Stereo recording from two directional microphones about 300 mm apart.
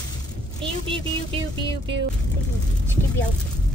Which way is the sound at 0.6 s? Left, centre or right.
Centre.